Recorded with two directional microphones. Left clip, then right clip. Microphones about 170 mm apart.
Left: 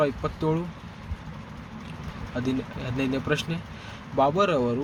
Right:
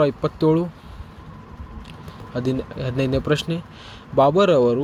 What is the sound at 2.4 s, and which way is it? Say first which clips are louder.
Speech: right 5 dB; 50° right (ahead or behind).